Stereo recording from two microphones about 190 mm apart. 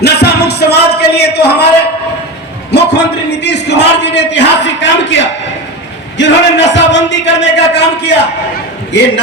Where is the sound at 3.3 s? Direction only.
65° left (ahead or behind).